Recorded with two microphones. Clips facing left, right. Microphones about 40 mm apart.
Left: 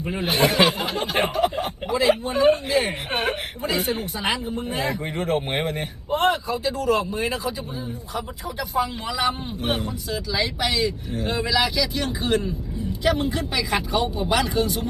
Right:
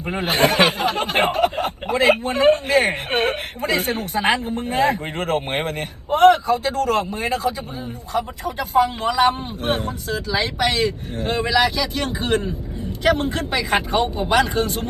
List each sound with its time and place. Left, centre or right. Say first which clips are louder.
0.0 s speech: right 3 dB; right
8.5 s speech: right 6 dB; right